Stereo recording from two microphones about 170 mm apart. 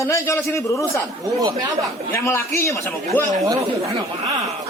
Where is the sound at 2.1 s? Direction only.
15° left (ahead or behind).